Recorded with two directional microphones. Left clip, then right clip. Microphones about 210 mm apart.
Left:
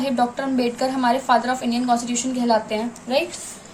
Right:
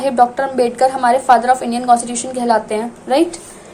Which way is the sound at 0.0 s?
25° right (ahead or behind).